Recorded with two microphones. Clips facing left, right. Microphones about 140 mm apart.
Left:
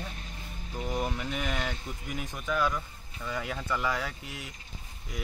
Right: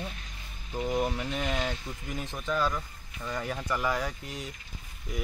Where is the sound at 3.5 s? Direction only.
15° right (ahead or behind).